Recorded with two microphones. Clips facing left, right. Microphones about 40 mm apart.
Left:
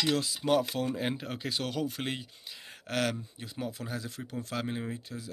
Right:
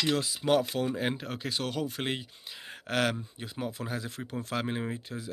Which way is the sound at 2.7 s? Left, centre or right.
Centre.